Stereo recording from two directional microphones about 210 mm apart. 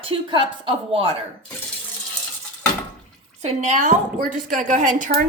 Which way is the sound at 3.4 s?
30° right (ahead or behind).